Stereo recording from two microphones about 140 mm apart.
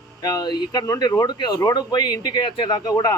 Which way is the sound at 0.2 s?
30° left (ahead or behind).